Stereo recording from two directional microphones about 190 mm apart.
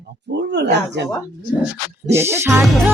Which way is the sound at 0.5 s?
65° right (ahead or behind).